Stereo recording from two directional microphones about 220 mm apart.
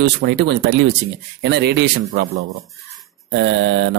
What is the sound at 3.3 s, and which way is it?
Mantra, 55° right (ahead or behind).